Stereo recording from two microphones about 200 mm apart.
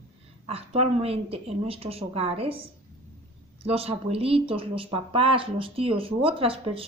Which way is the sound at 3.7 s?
30° right (ahead or behind).